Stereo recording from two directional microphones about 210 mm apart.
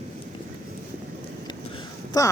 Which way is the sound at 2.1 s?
15° left (ahead or behind).